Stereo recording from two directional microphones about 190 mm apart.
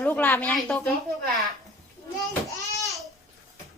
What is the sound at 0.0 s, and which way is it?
Speech, 10° left (ahead or behind).